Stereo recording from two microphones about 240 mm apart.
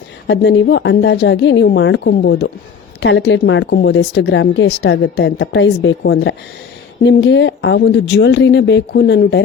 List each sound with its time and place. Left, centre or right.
0.3 s a woman's voice: left